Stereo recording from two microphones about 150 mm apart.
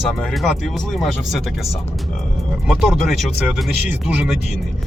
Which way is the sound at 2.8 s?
Centre (ahead or behind).